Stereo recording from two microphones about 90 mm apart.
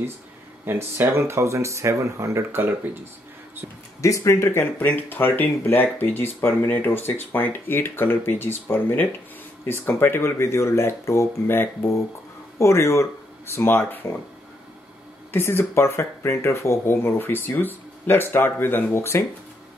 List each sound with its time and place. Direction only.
0.7 s speech: 30° right (ahead or behind)
4.0 s speech: 35° left (ahead or behind)
15.3 s speech: 30° left (ahead or behind)